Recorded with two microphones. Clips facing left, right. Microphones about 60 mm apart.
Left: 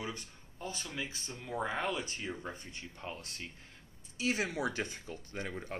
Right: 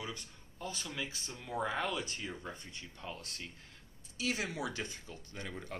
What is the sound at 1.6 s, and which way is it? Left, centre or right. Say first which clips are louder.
Speech: left 1 dB; centre.